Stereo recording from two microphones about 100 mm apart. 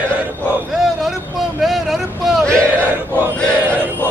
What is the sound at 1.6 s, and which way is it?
Vehicle, centre (ahead or behind).